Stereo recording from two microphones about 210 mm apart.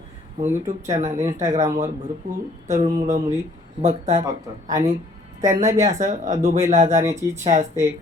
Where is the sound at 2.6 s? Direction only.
35° right (ahead or behind).